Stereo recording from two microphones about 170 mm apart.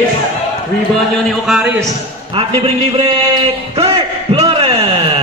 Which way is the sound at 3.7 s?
35° right (ahead or behind).